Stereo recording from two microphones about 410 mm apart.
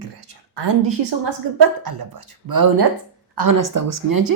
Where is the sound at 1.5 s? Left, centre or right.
Right.